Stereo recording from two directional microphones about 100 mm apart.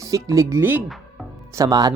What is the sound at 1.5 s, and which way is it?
Speech, 35° right (ahead or behind).